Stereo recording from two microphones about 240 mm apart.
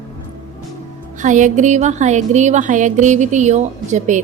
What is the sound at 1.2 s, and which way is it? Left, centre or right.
Music, right.